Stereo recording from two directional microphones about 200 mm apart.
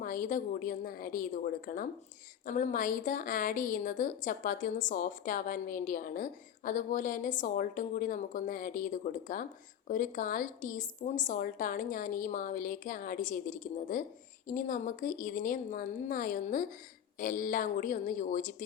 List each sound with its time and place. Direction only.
0.0 s a woman's voice: 45° left (ahead or behind)